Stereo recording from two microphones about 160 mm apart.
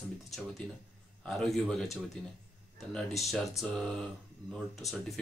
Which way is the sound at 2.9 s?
5° left (ahead or behind).